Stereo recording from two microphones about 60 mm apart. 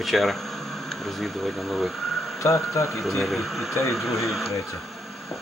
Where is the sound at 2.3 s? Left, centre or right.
Left.